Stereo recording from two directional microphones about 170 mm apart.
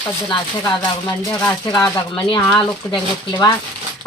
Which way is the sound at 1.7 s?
25° left (ahead or behind).